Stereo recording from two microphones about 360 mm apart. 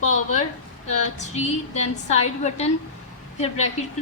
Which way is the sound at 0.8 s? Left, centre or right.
Centre.